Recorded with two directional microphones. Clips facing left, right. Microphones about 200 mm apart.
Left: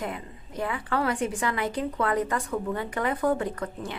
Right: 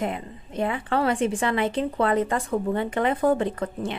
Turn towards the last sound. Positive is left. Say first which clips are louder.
# right 5 dB
turn(degrees=-25)  # may be behind; listen again after turning